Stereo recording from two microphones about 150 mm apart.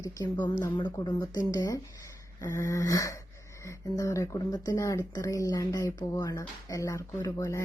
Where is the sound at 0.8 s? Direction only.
30° left (ahead or behind).